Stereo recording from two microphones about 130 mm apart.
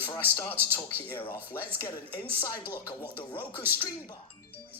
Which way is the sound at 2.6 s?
15° right (ahead or behind).